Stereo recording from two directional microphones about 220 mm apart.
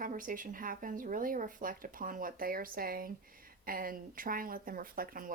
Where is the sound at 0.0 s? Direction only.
40° right (ahead or behind).